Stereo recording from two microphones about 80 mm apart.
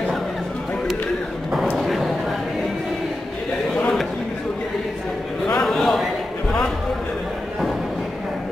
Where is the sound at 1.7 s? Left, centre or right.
Centre.